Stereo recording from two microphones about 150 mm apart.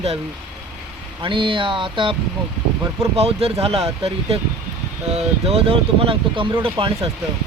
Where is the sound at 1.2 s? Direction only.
35° right (ahead or behind).